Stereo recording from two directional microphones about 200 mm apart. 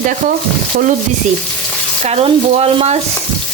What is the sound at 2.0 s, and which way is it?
Speech, 30° right (ahead or behind).